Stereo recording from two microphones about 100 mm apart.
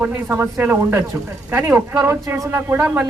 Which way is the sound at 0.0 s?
25° right (ahead or behind).